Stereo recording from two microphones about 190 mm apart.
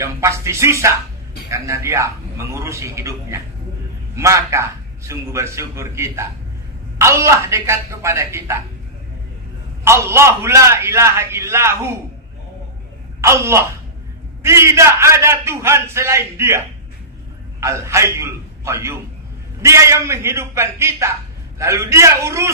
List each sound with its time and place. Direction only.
0.0 s a man's voice: 15° right (ahead or behind)
9.8 s a man's voice: 15° right (ahead or behind)
13.2 s a man's voice: 15° right (ahead or behind)
17.6 s a man's voice: 15° right (ahead or behind)